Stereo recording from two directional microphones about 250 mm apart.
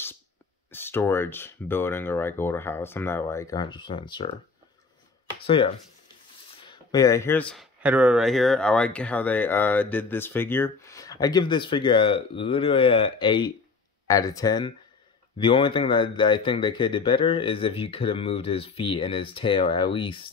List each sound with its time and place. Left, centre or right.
0.7 s speech: centre
5.4 s speech: left